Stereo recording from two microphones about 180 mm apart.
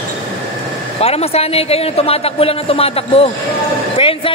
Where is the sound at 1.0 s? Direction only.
35° left (ahead or behind).